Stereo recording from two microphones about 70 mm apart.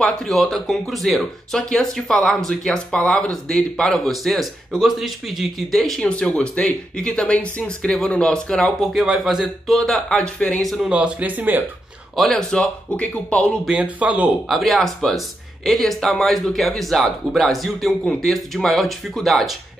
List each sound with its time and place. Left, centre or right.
0.0 s speech: centre
8.8 s speech: centre
10.6 s speech: centre
10.9 s speech: centre
12.2 s speech: centre
13.8 s speech: right
14.5 s speech: centre